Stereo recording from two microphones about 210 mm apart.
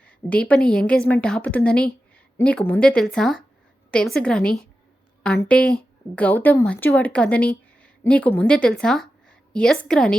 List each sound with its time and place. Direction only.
0.0 s speech: 5° left (ahead or behind)